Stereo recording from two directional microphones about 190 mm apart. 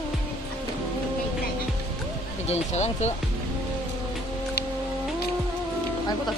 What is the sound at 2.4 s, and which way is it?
Speech, 35° left (ahead or behind).